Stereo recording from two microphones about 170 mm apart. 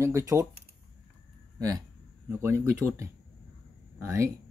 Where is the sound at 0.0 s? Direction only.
20° right (ahead or behind).